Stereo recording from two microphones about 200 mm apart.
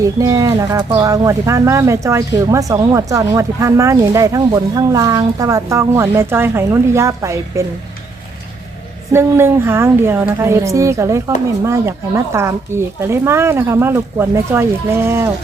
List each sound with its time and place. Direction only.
0.0 s speech: 15° right (ahead or behind)
9.1 s speech: 10° right (ahead or behind)